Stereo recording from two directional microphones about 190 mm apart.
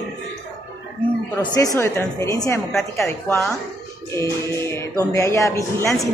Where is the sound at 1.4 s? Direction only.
20° left (ahead or behind).